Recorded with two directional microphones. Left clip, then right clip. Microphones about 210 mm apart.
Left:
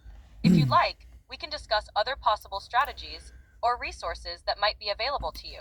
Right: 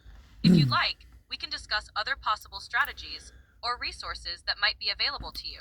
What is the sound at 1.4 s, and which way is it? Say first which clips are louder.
Speech: left 4 dB; 20° left (ahead or behind).